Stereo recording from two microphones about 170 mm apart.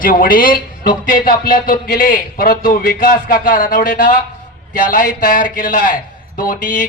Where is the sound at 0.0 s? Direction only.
55° left (ahead or behind).